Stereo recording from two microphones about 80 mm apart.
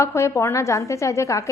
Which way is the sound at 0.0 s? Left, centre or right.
Left.